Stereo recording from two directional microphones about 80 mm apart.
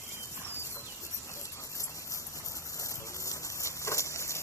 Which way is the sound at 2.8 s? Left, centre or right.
Left.